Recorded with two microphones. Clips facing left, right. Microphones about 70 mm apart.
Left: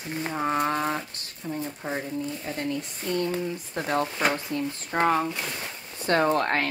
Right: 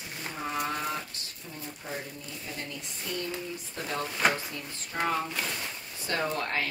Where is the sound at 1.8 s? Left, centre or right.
Left.